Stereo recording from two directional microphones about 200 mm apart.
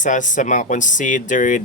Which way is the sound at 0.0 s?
40° left (ahead or behind).